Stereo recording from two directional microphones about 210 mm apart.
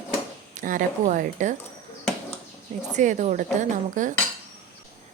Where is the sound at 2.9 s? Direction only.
35° right (ahead or behind).